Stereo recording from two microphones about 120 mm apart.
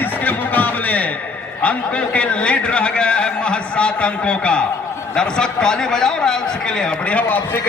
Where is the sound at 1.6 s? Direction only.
10° left (ahead or behind).